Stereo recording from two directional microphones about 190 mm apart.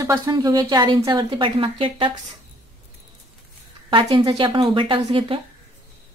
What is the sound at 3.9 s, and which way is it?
A woman's voice, 25° right (ahead or behind).